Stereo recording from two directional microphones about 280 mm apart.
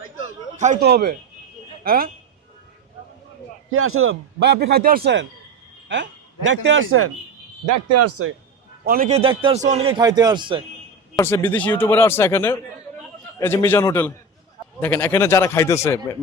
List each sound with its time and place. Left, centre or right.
0.5 s a man's voice: right
3.7 s a man's voice: right
6.5 s a man's voice: right
7.7 s speech: right
8.8 s a man's voice: right; by 10.6 s centre
11.2 s speech: centre